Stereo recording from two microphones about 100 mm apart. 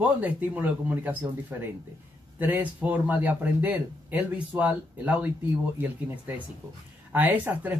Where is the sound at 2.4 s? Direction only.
20° right (ahead or behind).